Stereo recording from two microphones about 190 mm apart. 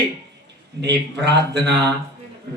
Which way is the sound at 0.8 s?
65° right (ahead or behind).